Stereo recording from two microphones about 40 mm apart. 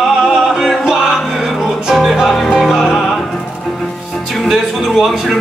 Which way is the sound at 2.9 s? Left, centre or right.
Centre.